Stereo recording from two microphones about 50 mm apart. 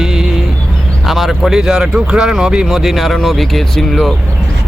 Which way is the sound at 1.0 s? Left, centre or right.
Centre.